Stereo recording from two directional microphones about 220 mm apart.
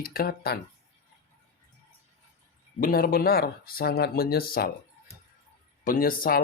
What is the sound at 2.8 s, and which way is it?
Speech, 40° left (ahead or behind).